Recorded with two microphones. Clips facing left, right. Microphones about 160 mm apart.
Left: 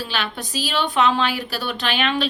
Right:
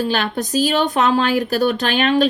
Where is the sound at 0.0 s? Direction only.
45° right (ahead or behind).